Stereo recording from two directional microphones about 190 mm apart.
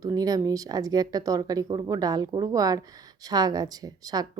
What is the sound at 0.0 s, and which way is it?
Speech, 20° right (ahead or behind).